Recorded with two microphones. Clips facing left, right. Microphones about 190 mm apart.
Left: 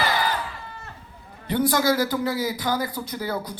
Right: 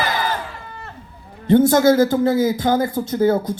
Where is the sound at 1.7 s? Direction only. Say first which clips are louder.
Right 8 dB; 50° right (ahead or behind).